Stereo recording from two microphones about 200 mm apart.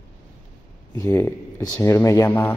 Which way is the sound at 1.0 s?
10° left (ahead or behind).